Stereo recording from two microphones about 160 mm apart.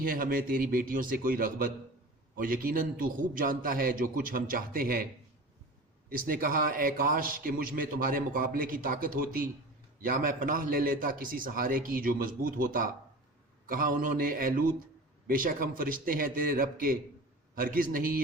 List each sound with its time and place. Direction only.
0.0 s a man's voice: 60° right (ahead or behind)
6.1 s a man's voice: 60° right (ahead or behind)